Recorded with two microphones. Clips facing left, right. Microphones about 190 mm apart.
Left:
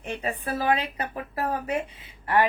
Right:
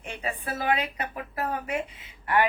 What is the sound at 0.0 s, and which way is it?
A woman's voice, 35° left (ahead or behind).